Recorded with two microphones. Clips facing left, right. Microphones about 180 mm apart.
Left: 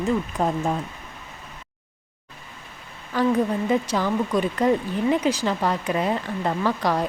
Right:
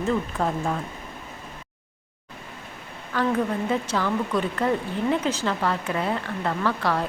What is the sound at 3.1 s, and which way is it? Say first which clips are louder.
Speech: left 3 dB; 15° left (ahead or behind).